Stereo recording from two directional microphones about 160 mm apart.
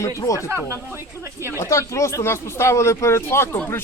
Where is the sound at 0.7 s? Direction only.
15° right (ahead or behind).